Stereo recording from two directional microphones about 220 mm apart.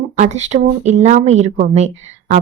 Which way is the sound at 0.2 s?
30° right (ahead or behind).